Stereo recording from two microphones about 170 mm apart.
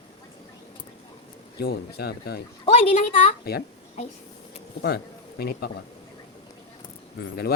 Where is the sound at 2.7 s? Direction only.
35° left (ahead or behind).